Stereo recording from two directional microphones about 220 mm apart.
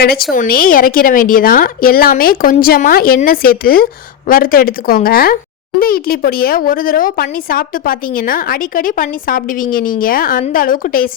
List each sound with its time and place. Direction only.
0.0 s speech: 45° left (ahead or behind)